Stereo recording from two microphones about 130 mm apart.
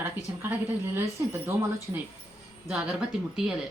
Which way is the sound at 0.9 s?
20° right (ahead or behind).